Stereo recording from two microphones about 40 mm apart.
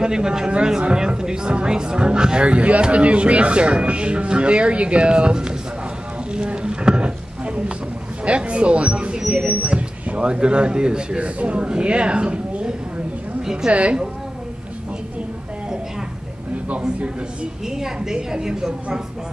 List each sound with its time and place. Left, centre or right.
0.0 s speech: centre
6.3 s a sound: right
8.3 s speech: right
13.7 s a woman's voice: right
16.8 s speech: right
17.6 s a woman's voice: centre